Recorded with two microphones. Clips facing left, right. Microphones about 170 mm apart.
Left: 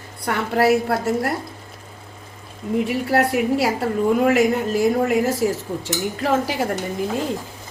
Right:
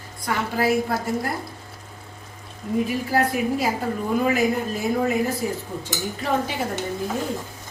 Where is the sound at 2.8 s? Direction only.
70° left (ahead or behind).